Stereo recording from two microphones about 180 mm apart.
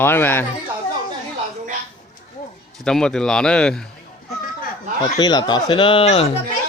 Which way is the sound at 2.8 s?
5° left (ahead or behind).